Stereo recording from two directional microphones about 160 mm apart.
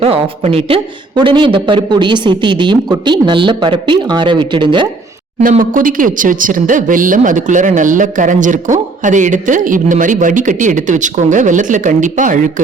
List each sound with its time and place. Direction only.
0.0 s speech: 40° right (ahead or behind)
5.4 s speech: 55° right (ahead or behind)